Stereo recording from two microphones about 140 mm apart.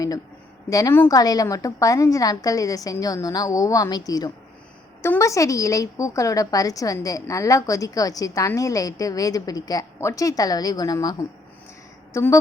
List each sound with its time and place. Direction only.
0.7 s a woman's voice: 20° left (ahead or behind)